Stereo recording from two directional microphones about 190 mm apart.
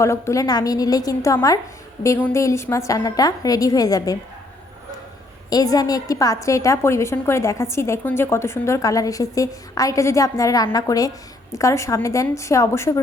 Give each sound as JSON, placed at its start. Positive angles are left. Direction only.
{"t": 0.0, "sound": "a woman's voice", "side_deg": 15}
{"t": 5.5, "sound": "a woman's voice", "side_deg": 20}